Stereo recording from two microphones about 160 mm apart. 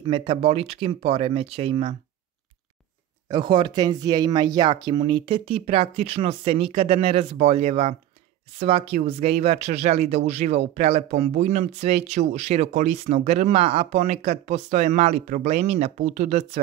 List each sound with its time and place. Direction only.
0.0 s speech: 35° right (ahead or behind)
3.3 s speech: 30° right (ahead or behind)